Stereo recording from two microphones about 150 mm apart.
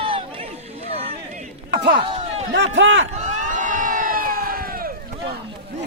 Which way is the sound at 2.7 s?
50° right (ahead or behind).